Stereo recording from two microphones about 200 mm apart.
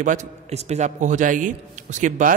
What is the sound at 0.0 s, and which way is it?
A man's voice, 35° right (ahead or behind).